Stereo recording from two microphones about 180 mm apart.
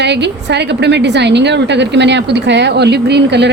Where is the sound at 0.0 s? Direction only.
70° right (ahead or behind).